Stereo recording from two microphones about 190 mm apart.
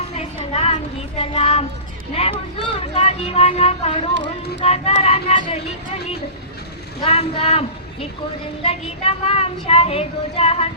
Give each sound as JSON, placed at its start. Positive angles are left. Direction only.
{"t": 0.2, "sound": "a sound", "side_deg": 30}
{"t": 1.2, "sound": "child singing", "side_deg": 30}
{"t": 2.7, "sound": "speech", "side_deg": 30}
{"t": 7.0, "sound": "speech", "side_deg": 30}
{"t": 8.6, "sound": "speech", "side_deg": 30}